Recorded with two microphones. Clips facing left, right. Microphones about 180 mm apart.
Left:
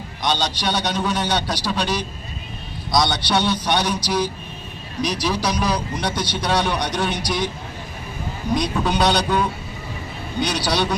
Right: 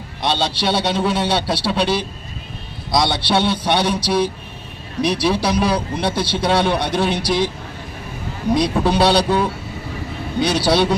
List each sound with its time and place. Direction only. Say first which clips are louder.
0.2 s a man's voice: right 3 dB; 30° right (ahead or behind)
8.5 s a man's voice: right 4 dB; 30° right (ahead or behind)